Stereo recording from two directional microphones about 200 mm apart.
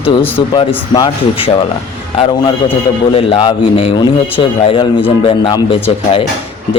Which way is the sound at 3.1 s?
25° left (ahead or behind).